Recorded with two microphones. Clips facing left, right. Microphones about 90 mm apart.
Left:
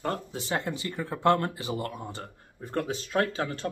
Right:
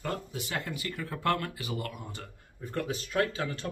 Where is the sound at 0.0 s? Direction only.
35° left (ahead or behind).